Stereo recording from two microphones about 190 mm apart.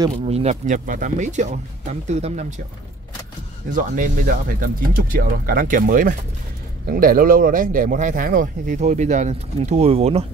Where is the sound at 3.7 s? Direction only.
45° right (ahead or behind).